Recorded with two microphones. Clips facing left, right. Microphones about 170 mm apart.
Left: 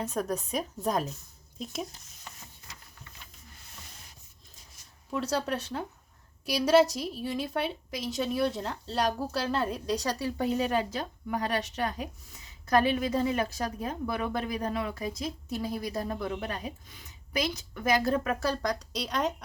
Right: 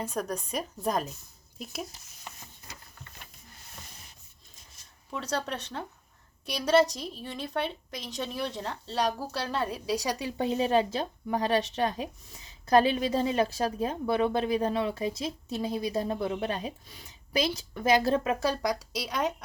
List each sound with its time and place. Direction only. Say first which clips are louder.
0.0 s a woman's voice: left 1 dB; centre (ahead or behind)
5.1 s a woman's voice: left 3 dB; 5° left (ahead or behind)